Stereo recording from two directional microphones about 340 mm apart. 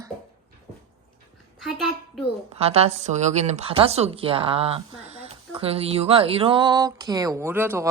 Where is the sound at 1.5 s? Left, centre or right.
Centre.